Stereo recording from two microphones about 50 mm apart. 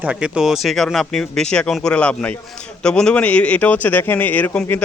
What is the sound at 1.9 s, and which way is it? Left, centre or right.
Speech, left.